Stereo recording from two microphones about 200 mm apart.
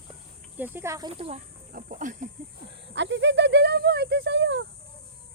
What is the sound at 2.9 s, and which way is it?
Speech, 65° right (ahead or behind).